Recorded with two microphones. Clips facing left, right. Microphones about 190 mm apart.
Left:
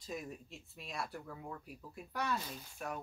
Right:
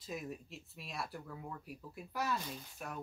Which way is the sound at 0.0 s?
Centre (ahead or behind).